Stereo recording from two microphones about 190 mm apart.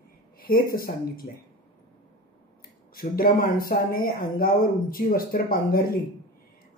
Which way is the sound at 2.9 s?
50° left (ahead or behind).